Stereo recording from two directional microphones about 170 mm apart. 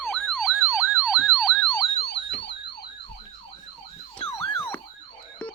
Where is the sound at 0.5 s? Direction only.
10° right (ahead or behind).